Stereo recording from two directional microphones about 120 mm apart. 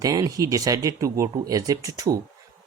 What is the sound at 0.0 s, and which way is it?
Speech, 30° right (ahead or behind).